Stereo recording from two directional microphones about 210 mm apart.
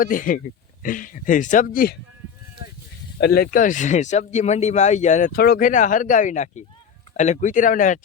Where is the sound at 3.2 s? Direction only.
45° left (ahead or behind).